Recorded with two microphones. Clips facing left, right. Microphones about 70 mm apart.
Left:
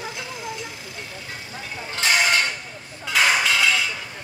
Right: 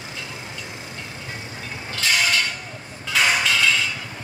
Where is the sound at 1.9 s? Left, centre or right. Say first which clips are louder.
Left 2 dB; left.